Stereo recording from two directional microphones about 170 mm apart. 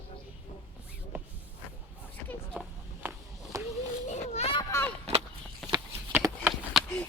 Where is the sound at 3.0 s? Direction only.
20° right (ahead or behind).